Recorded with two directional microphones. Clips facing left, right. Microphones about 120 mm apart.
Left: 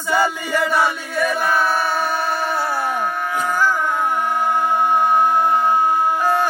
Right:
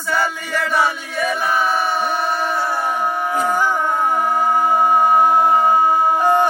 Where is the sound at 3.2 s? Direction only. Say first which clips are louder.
Right 1 dB; 20° right (ahead or behind); by 4.4 s 35° right (ahead or behind).